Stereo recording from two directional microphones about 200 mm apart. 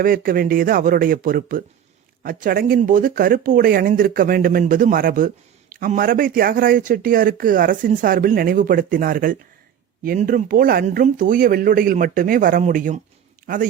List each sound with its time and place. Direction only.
0.0 s speech: 45° right (ahead or behind)